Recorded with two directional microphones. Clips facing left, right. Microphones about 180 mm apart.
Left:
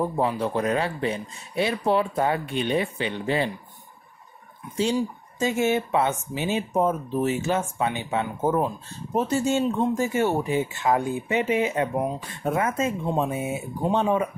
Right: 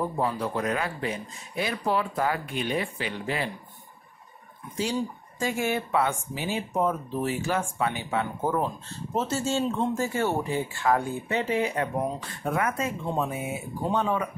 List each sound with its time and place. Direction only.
0.0 s speech: 20° left (ahead or behind)
4.9 s speech: 20° left (ahead or behind)